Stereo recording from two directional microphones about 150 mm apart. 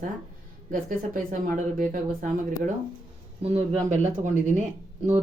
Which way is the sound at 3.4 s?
45° right (ahead or behind).